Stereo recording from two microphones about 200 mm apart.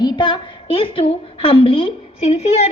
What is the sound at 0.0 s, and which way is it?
A woman's voice, 20° left (ahead or behind).